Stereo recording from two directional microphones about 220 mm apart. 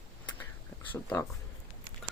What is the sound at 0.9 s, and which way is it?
Speech, 10° left (ahead or behind).